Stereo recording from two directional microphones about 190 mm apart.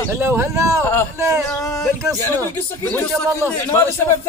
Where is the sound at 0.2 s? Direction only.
10° right (ahead or behind).